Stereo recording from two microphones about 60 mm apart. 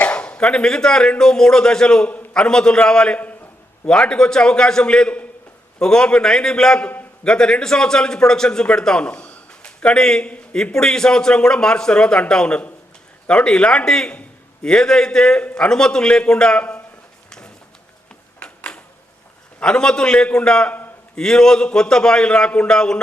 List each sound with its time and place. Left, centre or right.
0.0 s a man's voice: left
6.8 s a man's voice: left
7.3 s a man's voice: centre
15.4 s a man's voice: left
17.2 s a sound: centre
19.6 s a man's voice: centre